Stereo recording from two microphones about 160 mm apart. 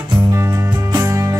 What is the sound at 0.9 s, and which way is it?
Music, 15° right (ahead or behind).